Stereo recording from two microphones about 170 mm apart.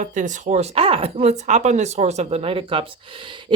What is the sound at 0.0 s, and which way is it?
Speech, 50° right (ahead or behind).